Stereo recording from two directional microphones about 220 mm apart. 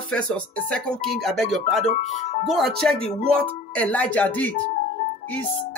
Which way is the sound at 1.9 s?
35° left (ahead or behind).